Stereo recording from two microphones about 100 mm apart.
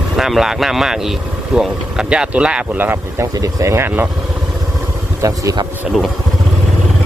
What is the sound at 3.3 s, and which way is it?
Speech, 35° right (ahead or behind).